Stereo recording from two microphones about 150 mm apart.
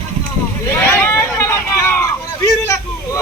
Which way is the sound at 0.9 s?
15° left (ahead or behind).